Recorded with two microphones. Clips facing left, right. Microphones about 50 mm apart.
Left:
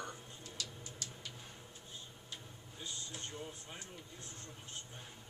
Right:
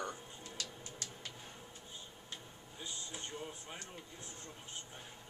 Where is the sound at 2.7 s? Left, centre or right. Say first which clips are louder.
Right 1 dB; centre.